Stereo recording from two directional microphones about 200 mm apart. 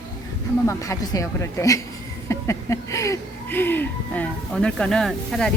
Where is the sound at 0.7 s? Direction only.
15° left (ahead or behind).